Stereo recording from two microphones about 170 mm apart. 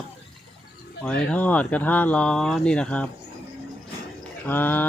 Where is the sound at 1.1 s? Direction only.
5° left (ahead or behind).